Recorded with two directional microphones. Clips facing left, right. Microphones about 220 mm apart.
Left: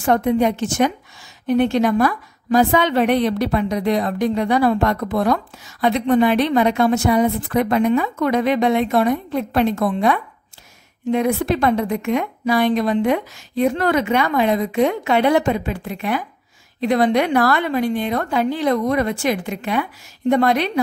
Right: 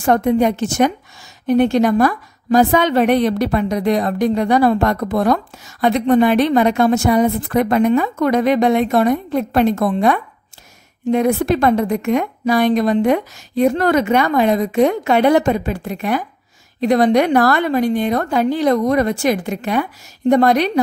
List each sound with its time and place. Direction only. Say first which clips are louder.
0.0 s a woman's voice: right 2 dB; 45° right (ahead or behind)